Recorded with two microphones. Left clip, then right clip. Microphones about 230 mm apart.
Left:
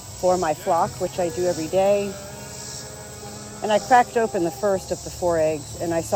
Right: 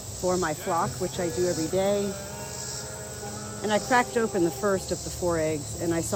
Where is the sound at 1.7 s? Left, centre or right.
Left.